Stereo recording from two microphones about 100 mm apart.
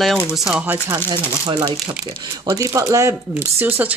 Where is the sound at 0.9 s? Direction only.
45° right (ahead or behind).